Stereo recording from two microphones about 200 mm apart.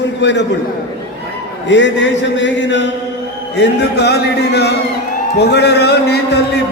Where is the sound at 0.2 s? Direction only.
60° left (ahead or behind).